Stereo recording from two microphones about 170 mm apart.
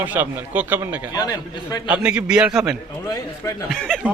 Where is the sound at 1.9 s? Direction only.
5° right (ahead or behind).